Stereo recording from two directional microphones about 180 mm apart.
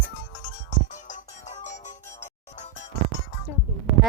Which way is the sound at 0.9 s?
45° left (ahead or behind).